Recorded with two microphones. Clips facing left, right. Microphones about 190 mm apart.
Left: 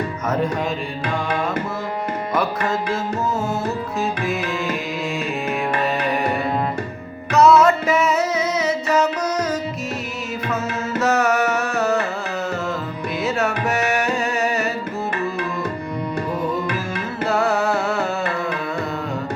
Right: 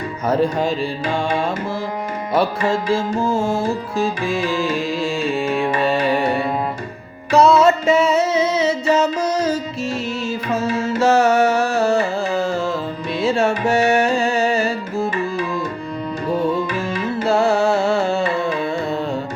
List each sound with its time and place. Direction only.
0.3 s music: 30° right (ahead or behind)
2.3 s music: 30° right (ahead or behind)
13.2 s tabla: 30° right (ahead or behind)
17.2 s music: 30° right (ahead or behind)